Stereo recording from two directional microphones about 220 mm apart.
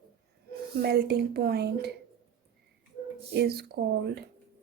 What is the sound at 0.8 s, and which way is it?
Speech, 45° right (ahead or behind).